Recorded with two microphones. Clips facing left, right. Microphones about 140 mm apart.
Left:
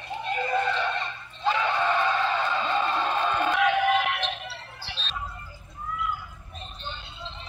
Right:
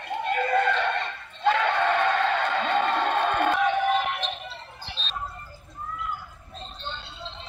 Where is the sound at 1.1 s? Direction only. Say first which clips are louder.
Right 5 dB; 65° right (ahead or behind).